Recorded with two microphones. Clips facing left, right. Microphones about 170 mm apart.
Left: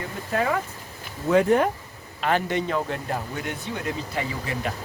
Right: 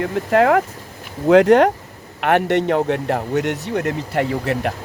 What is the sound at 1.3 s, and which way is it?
Speech, 85° right.